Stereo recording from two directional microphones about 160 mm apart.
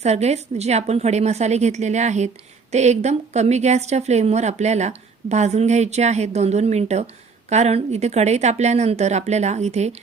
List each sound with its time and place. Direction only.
0.0 s speech: 45° right (ahead or behind)